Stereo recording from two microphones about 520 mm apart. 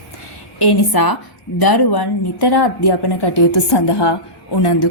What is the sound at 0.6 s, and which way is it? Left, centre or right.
A woman's voice, left.